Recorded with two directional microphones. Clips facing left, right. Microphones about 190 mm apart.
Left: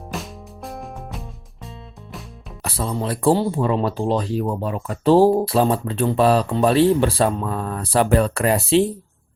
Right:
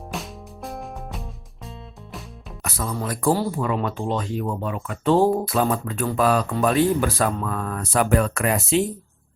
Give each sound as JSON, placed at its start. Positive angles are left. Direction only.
{"t": 0.1, "sound": "music", "side_deg": 0}
{"t": 2.6, "sound": "speech", "side_deg": 30}